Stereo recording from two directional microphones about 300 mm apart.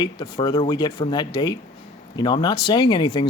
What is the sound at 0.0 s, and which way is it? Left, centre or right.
Speech, centre.